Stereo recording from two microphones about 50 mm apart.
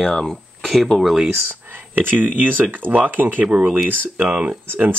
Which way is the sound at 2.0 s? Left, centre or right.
Right.